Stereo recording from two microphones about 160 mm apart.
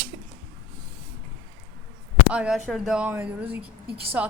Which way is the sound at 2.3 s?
5° right (ahead or behind).